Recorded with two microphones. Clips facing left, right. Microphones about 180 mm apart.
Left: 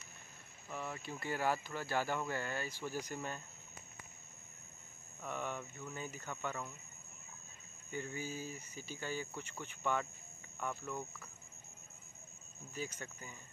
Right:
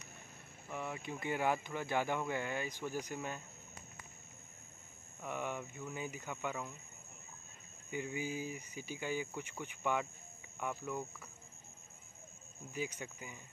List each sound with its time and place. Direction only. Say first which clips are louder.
0.7 s speech: right 2 dB; 15° right (ahead or behind)
5.2 s speech: right 1 dB; 10° right (ahead or behind)
7.9 s speech: right 3 dB; 15° right (ahead or behind)
12.7 s speech: right 3 dB; 15° right (ahead or behind)